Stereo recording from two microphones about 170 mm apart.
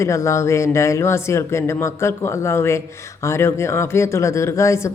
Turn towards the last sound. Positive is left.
turn(degrees=15)  # may be behind; listen again after turning